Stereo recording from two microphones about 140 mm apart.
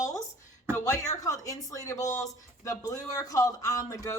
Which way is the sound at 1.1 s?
25° left (ahead or behind).